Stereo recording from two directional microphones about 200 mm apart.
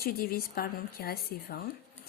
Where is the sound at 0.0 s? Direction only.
50° left (ahead or behind).